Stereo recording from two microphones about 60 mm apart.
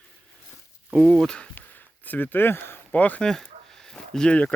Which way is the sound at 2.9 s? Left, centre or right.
Left.